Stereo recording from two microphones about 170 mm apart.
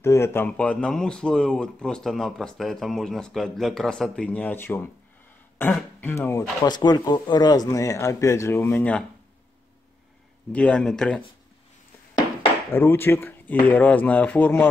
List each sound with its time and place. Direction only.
0.0 s speech: 15° left (ahead or behind)
6.6 s speech: 25° left (ahead or behind)
10.5 s speech: 5° left (ahead or behind)
12.7 s speech: 15° left (ahead or behind)